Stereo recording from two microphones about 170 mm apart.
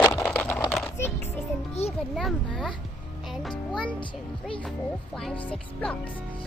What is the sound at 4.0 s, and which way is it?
Speech, 30° left (ahead or behind).